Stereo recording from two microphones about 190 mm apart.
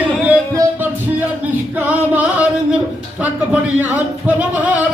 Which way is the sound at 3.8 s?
10° right (ahead or behind).